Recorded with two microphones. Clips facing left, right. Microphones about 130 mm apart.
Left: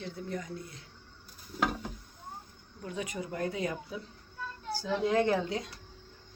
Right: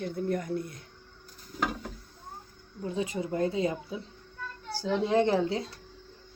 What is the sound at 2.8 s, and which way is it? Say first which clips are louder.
Speech: right 6 dB; 30° right (ahead or behind).